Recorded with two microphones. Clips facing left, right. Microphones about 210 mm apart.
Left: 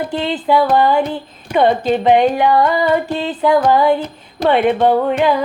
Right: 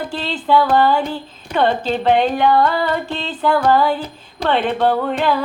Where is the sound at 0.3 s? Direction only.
5° left (ahead or behind).